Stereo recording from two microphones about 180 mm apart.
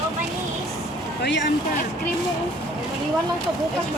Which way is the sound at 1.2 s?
80° left.